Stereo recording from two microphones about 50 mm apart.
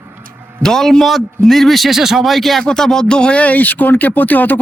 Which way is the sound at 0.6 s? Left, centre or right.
Centre.